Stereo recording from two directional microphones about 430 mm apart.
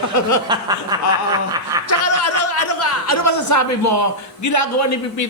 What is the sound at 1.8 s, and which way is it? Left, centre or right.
Chuckle, left.